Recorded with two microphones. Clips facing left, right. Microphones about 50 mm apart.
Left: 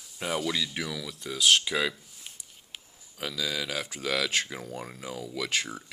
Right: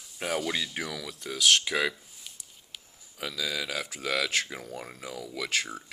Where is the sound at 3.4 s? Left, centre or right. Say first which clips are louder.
Even; centre.